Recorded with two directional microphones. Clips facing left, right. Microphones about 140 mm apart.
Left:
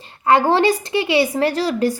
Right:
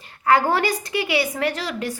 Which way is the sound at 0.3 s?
25° left (ahead or behind).